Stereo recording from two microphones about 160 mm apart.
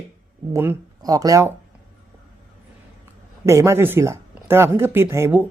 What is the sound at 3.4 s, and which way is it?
A man's voice, 15° right (ahead or behind).